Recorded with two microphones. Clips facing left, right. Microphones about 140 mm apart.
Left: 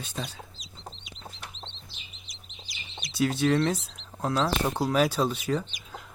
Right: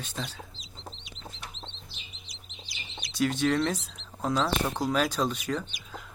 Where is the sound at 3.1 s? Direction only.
10° left (ahead or behind).